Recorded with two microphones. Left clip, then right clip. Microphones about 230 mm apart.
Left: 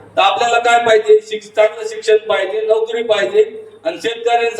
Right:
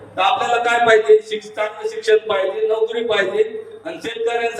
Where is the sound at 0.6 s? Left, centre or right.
Left.